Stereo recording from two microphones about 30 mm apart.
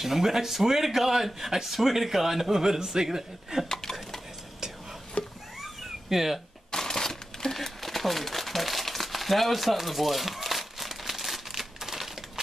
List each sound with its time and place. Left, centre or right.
0.0 s a man's voice: centre
2.6 s a man's voice: centre
5.2 s a sound: left
5.6 s cat: centre
6.7 s a sound: centre
7.5 s crumpling: centre